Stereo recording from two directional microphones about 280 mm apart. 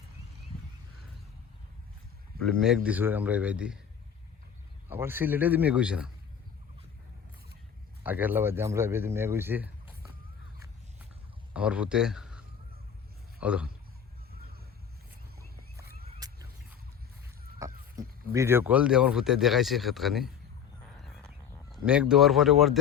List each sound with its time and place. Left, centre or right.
2.6 s speech: centre
4.9 s speech: centre
8.0 s speech: centre
11.5 s a man's voice: centre
14.3 s vehicle: right
16.2 s a sound: centre
18.3 s speech: centre
20.9 s a sound: centre